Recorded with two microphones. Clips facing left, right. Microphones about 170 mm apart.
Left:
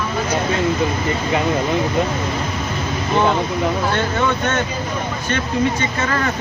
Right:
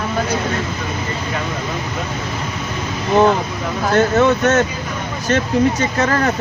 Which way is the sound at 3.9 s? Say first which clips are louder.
Right 6 dB; 40° right (ahead or behind).